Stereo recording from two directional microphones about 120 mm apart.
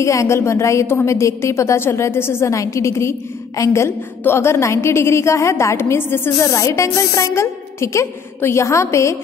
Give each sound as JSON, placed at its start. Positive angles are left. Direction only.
{"t": 0.0, "sound": "a woman's voice", "side_deg": 25}